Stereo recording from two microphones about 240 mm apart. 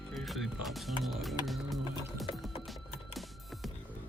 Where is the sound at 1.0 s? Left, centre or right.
Centre.